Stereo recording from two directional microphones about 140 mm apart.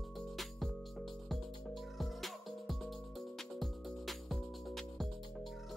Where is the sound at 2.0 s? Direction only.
Centre (ahead or behind).